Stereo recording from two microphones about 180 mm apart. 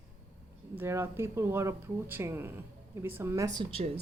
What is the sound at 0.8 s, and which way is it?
Speech, 15° right (ahead or behind).